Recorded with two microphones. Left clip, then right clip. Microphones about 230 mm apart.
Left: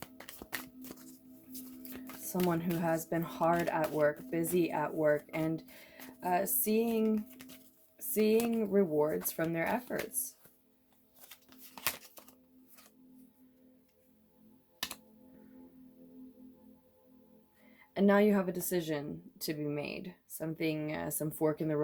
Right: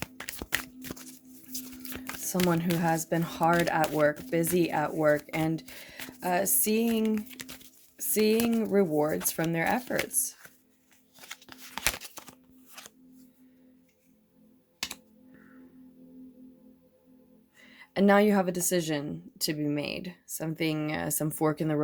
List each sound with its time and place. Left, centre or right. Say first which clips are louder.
0.0 s a sound: right 10 dB; right
1.5 s speech: right 7 dB; right
11.3 s music: right 12 dB; right
17.7 s speech: right 5 dB; right